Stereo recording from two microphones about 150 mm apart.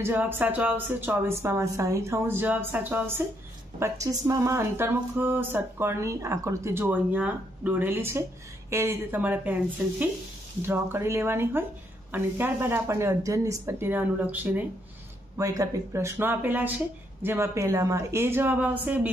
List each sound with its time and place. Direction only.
0.0 s speech: 15° right (ahead or behind)
15.3 s speech: 20° right (ahead or behind)